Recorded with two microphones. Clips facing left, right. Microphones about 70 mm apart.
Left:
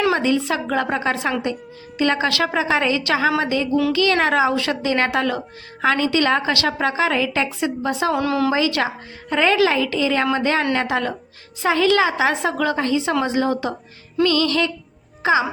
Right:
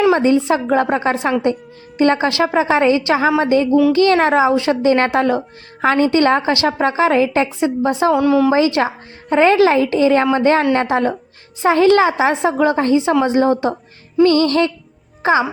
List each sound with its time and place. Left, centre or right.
0.1 s a woman's voice: right
8.1 s a woman's voice: centre
8.5 s a woman's voice: right